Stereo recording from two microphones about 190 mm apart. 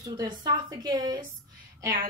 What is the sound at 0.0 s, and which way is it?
A woman's voice, 25° right (ahead or behind).